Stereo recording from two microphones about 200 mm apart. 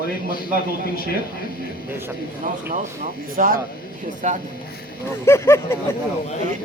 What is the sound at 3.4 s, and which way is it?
Speech, 40° right (ahead or behind).